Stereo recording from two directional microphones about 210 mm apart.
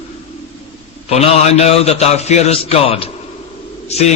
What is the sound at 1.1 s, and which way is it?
A man's voice, 30° left (ahead or behind).